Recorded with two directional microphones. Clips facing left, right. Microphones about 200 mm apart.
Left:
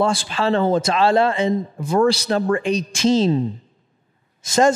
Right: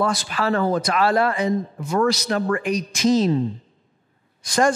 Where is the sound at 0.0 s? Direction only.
25° left (ahead or behind).